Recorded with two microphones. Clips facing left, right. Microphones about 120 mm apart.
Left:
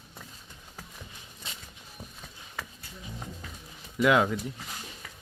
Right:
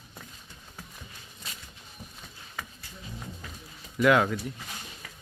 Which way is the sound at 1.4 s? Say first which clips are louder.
Left 1 dB; 25° left (ahead or behind).